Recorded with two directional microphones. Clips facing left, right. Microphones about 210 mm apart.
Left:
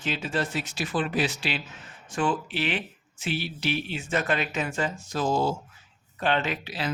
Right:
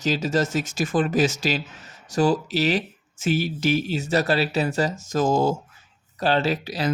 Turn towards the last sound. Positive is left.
turn(degrees=-40)  # may be behind; listen again after turning